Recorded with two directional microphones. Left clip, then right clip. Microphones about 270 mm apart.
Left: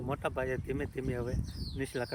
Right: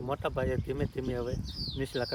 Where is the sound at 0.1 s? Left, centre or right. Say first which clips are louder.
Right 2 dB; centre.